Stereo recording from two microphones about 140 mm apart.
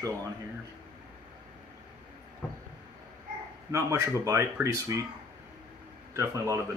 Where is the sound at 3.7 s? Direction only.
20° right (ahead or behind).